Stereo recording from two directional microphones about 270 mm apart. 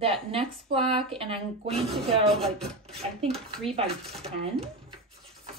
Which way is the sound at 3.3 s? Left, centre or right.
Centre.